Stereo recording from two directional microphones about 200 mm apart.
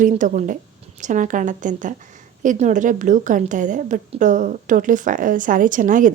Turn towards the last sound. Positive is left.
turn(degrees=-40)  # may be behind; listen again after turning